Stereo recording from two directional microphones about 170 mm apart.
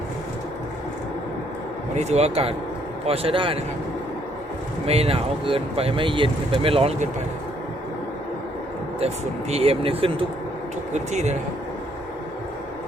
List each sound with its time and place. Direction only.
2.0 s speech: 40° right (ahead or behind)
4.9 s speech: 35° right (ahead or behind)
9.5 s speech: 35° right (ahead or behind)